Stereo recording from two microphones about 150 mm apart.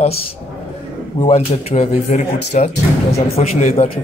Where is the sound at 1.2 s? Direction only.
50° left (ahead or behind).